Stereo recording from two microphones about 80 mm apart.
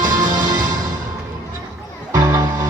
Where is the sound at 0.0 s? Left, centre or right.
Right.